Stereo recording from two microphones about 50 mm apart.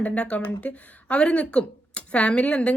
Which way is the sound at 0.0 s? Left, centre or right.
Left.